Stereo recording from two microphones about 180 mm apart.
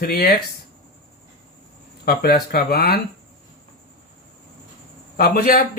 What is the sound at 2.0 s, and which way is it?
Speech, 60° left (ahead or behind).